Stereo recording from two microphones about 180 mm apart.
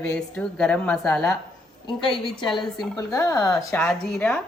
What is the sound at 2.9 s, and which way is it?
Speech, 15° left (ahead or behind).